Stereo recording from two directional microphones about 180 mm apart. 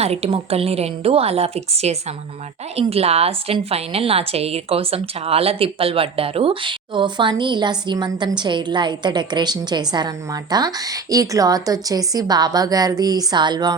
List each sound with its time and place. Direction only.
0.0 s a woman's voice: 35° right (ahead or behind)